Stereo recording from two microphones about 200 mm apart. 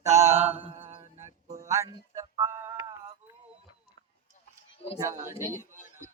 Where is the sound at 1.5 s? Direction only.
15° right (ahead or behind).